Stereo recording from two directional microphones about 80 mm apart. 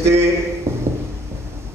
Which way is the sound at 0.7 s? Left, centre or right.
Right.